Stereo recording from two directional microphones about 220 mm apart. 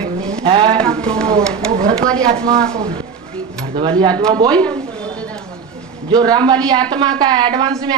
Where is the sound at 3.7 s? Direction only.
20° right (ahead or behind).